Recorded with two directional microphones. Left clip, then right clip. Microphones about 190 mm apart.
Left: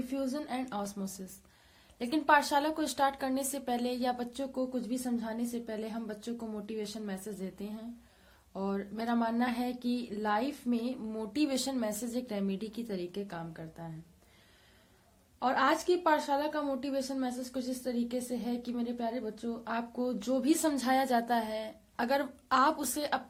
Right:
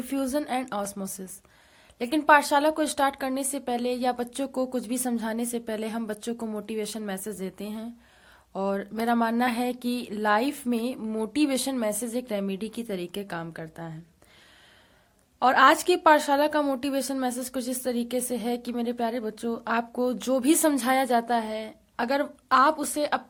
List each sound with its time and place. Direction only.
0.1 s speech: 45° right (ahead or behind)
15.4 s speech: 45° right (ahead or behind)